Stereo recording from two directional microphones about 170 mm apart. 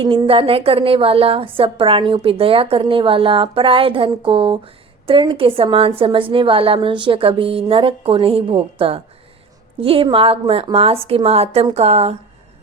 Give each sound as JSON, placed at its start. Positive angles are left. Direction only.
{"t": 0.0, "sound": "a woman's voice", "side_deg": -25}